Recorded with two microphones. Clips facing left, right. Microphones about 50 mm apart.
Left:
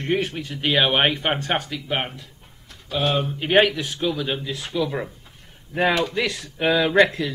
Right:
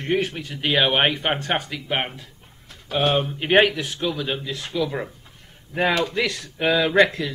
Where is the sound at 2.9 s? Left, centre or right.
Right.